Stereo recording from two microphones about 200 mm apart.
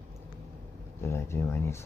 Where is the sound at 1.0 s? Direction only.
15° left (ahead or behind).